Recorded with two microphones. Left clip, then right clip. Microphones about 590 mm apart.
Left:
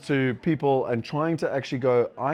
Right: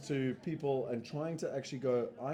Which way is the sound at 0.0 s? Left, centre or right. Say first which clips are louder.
Left 12 dB; left.